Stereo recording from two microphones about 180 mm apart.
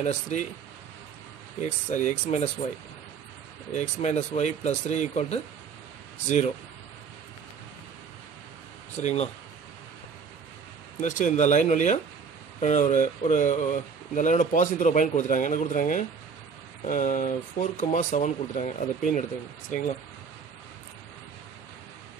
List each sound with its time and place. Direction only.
0.0 s speech: 40° left (ahead or behind)
1.6 s speech: 40° left (ahead or behind)
3.7 s speech: 40° left (ahead or behind)
8.9 s speech: 40° left (ahead or behind)
11.0 s speech: 45° left (ahead or behind)